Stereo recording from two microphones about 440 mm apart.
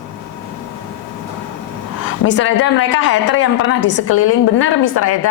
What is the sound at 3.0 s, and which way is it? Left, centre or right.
A woman's voice, left.